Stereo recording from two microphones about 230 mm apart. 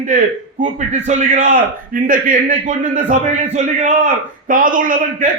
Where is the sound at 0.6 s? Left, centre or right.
Right.